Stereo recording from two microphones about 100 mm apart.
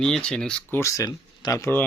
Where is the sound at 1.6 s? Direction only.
20° left (ahead or behind).